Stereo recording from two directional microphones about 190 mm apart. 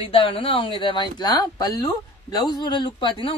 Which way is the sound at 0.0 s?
30° left (ahead or behind).